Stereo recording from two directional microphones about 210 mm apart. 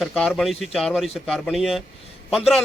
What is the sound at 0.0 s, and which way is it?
Speech, centre (ahead or behind).